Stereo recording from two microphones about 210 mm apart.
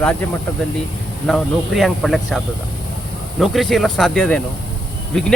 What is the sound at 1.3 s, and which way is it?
Speech, centre (ahead or behind).